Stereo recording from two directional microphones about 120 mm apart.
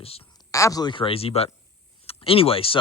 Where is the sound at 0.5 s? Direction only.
30° left (ahead or behind).